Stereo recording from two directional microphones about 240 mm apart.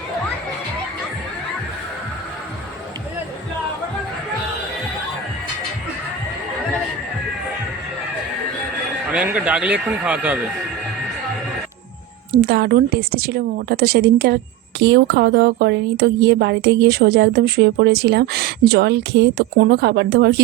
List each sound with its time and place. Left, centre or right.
9.0 s speech: centre
12.3 s a woman's voice: right